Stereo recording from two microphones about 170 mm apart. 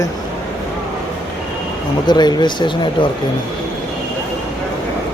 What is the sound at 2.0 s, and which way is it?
Speech, 25° left (ahead or behind).